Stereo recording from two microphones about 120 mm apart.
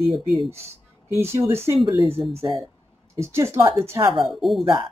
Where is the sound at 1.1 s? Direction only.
20° right (ahead or behind).